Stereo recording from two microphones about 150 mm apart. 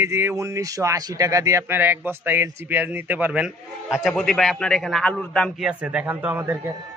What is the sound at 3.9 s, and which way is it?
A man's voice, centre (ahead or behind).